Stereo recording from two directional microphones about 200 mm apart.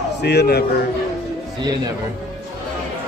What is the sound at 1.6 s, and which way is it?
Speech, 20° right (ahead or behind).